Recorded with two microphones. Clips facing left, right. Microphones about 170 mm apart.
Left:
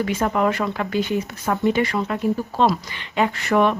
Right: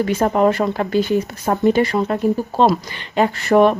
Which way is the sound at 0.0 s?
35° right (ahead or behind).